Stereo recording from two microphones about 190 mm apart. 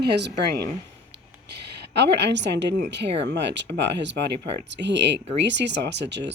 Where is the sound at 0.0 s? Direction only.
60° right (ahead or behind).